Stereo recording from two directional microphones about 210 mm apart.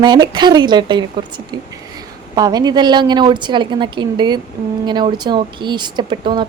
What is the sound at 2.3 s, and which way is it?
Speech, 20° right (ahead or behind).